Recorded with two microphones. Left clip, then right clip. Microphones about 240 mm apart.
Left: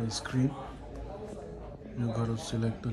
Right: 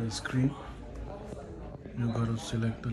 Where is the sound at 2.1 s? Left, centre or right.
Centre.